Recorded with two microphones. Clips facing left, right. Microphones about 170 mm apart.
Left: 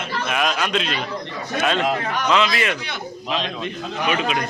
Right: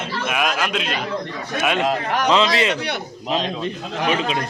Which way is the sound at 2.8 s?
65° right (ahead or behind).